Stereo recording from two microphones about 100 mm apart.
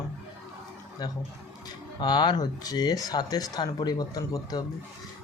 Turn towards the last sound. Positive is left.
turn(degrees=40)  # may be behind; listen again after turning